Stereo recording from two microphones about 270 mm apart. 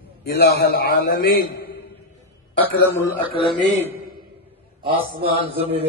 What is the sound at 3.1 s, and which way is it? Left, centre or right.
Speech, centre.